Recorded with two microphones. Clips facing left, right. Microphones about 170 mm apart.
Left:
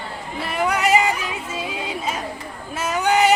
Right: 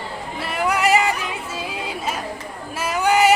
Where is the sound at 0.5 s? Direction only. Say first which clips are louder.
Even; 5° right (ahead or behind).